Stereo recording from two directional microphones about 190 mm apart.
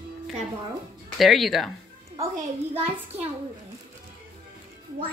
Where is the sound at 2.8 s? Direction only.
30° right (ahead or behind).